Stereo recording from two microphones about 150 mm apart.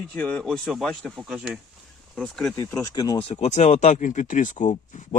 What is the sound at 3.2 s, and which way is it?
Speech, 45° left (ahead or behind).